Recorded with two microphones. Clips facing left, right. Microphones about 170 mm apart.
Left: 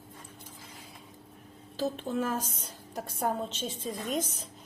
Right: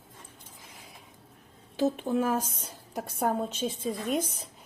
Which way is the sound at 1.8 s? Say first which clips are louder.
Right 4 dB; 10° right (ahead or behind).